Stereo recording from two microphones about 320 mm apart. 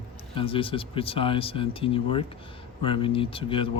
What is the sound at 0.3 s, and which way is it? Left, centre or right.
Speech, centre.